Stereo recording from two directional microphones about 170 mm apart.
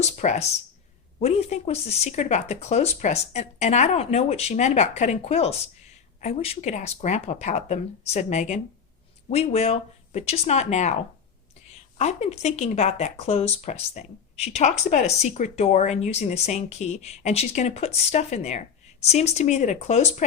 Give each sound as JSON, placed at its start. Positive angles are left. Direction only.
{"t": 0.0, "sound": "speech", "side_deg": 40}